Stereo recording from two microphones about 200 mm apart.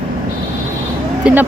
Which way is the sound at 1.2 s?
5° right (ahead or behind).